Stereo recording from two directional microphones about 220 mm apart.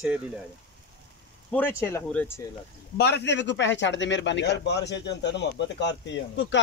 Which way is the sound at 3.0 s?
50° left (ahead or behind).